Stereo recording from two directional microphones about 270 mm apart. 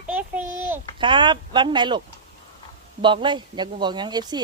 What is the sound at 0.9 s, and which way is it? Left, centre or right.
A child's voice, centre.